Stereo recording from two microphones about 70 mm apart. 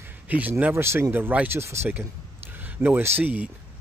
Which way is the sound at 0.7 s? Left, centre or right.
Right.